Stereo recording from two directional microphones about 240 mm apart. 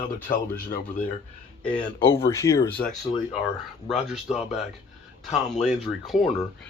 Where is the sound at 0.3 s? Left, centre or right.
Left.